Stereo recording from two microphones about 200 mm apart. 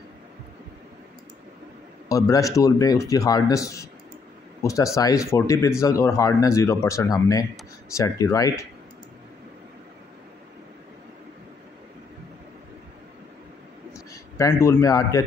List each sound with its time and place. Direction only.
2.0 s a man's voice: 15° left (ahead or behind)
13.9 s a man's voice: 15° left (ahead or behind)